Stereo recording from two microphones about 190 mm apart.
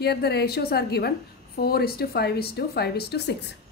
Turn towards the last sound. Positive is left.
turn(degrees=60)  # may be behind; listen again after turning